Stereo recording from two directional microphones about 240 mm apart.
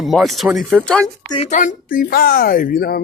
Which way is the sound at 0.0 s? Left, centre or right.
Centre.